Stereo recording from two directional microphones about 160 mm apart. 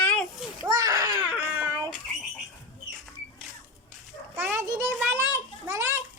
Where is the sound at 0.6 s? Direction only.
20° right (ahead or behind).